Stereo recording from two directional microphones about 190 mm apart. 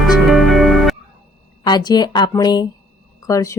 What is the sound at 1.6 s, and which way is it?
A woman's voice, 20° left (ahead or behind).